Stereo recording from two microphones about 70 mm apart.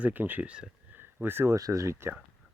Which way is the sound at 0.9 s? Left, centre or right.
Right.